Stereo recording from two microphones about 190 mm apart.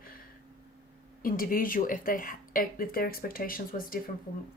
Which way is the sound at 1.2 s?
45° left (ahead or behind).